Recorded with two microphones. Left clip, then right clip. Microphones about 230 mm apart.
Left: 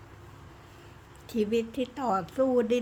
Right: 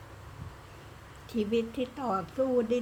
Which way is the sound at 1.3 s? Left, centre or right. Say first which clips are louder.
Left 2 dB; left.